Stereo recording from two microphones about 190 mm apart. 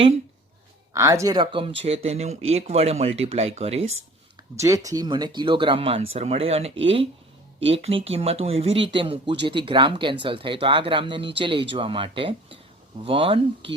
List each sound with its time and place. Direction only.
0.9 s speech: 15° right (ahead or behind); by 3.8 s 35° right (ahead or behind)
4.5 s speech: 15° right (ahead or behind)